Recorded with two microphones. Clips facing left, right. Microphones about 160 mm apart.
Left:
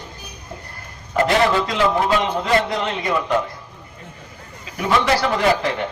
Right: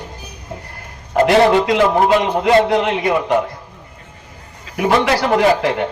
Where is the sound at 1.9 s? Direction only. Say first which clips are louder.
Right 5 dB; 60° right (ahead or behind).